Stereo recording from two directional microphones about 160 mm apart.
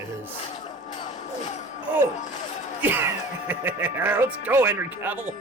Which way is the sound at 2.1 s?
50° left (ahead or behind).